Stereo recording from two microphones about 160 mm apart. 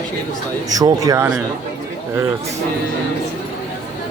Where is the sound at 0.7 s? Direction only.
20° right (ahead or behind).